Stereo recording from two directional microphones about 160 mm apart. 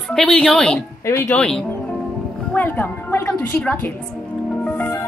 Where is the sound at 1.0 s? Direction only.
15° left (ahead or behind).